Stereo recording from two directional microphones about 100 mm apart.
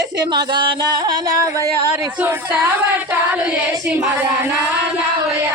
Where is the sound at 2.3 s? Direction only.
20° right (ahead or behind).